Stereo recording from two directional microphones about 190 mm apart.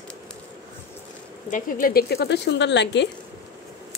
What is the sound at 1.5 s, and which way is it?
Speech, 50° left (ahead or behind).